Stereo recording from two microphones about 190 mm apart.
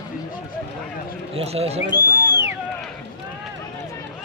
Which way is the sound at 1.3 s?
35° right (ahead or behind).